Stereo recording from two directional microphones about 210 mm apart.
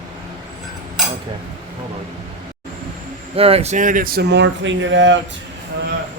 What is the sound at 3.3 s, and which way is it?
Speech, 30° right (ahead or behind).